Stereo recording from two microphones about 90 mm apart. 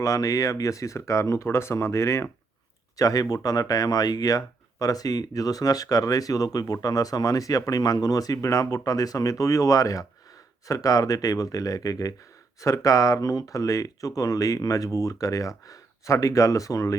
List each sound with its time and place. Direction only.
0.0 s speech: 40° left (ahead or behind)
3.0 s speech: 40° left (ahead or behind)